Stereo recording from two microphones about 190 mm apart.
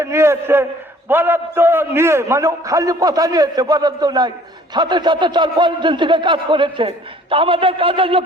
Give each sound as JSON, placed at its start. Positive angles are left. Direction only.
{"t": 0.0, "sound": "a man's voice", "side_deg": -15}